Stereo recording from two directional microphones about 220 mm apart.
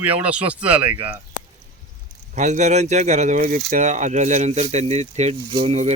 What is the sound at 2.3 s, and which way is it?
Speech, 35° right (ahead or behind).